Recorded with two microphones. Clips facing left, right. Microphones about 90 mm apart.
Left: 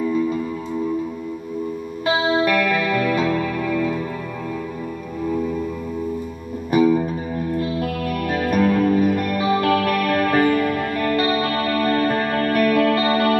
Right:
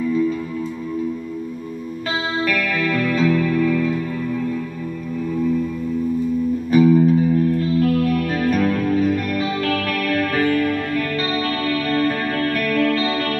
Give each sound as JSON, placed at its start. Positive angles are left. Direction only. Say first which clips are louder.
{"t": 2.6, "sound": "music", "louder": "left 1 dB", "side_deg": 15}
{"t": 3.3, "sound": "music", "louder": "right 4 dB", "side_deg": 30}
{"t": 3.6, "sound": "music", "louder": "right 3 dB", "side_deg": 10}
{"t": 6.7, "sound": "music", "louder": "right 2 dB", "side_deg": 20}
{"t": 8.3, "sound": "music", "louder": "even", "side_deg": 10}